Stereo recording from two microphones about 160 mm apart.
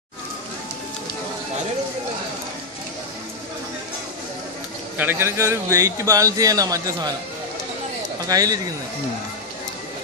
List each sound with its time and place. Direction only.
4.9 s speech: 15° right (ahead or behind)
8.3 s speech: 20° right (ahead or behind)